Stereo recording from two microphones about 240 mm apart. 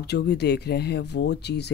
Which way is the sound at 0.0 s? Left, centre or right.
Left.